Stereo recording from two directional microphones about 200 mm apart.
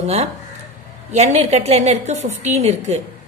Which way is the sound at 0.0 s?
30° right (ahead or behind).